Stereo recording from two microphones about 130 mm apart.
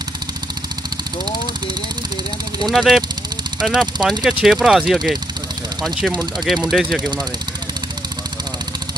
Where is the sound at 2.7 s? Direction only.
Centre (ahead or behind).